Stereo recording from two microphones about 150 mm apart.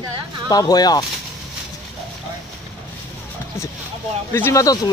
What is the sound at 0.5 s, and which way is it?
Speech, 25° left (ahead or behind).